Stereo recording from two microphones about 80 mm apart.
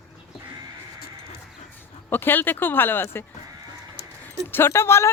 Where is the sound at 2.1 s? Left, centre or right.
Left.